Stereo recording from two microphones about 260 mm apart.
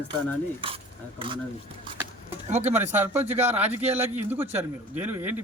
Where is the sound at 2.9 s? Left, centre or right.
Centre.